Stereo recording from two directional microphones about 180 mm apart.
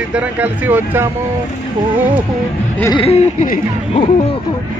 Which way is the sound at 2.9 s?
35° left (ahead or behind).